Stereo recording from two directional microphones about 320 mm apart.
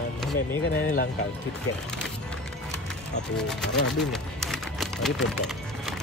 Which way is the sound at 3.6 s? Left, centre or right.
Left.